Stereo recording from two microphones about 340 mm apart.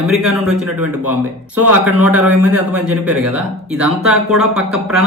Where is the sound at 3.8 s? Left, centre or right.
Centre.